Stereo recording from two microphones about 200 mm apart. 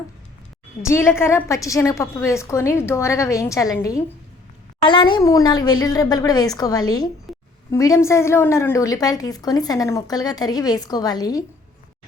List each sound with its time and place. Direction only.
0.8 s a woman's voice: 15° left (ahead or behind)